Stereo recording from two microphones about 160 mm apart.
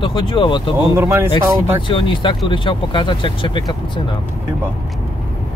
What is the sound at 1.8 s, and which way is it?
Speech, 30° left (ahead or behind).